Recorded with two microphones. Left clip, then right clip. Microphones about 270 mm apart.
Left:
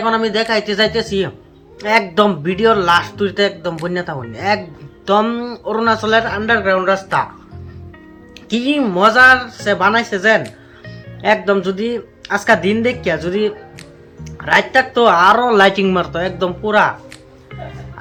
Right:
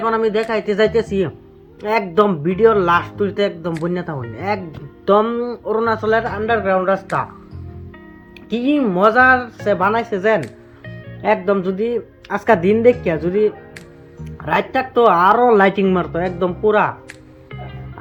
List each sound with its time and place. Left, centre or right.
0.0 s speech: right
8.5 s speech: right